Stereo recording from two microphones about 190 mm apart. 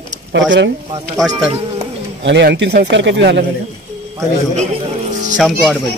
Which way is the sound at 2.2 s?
65° right (ahead or behind).